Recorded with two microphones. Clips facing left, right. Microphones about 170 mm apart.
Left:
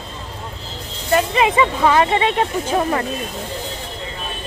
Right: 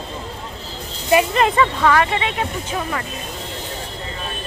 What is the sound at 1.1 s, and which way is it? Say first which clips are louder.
Speech: right 2 dB; 5° right (ahead or behind).